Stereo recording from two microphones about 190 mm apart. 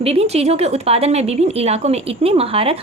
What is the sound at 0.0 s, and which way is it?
A woman's voice, 30° right (ahead or behind).